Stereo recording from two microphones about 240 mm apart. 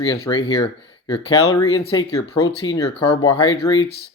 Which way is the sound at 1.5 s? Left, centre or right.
Centre.